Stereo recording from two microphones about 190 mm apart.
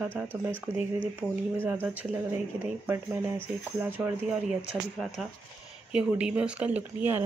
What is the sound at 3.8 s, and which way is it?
Speech, 10° right (ahead or behind).